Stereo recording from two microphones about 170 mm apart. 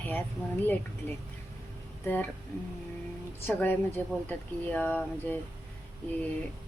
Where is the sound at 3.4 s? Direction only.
10° left (ahead or behind).